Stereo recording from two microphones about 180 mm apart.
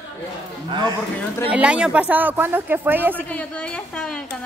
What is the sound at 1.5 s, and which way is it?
Speech, 5° right (ahead or behind).